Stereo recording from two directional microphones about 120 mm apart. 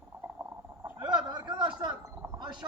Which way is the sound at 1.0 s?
35° right (ahead or behind).